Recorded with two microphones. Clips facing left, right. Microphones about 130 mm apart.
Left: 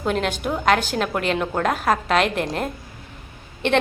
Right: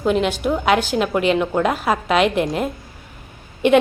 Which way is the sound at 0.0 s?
Centre (ahead or behind).